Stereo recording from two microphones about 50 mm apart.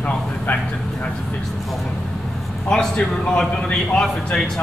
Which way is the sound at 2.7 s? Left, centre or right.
Centre.